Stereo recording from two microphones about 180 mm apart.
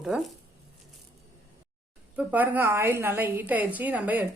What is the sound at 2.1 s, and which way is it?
A woman's voice, 10° right (ahead or behind).